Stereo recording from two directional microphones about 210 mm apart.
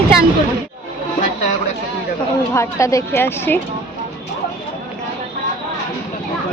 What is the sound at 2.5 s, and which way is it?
A woman's voice, 15° left (ahead or behind).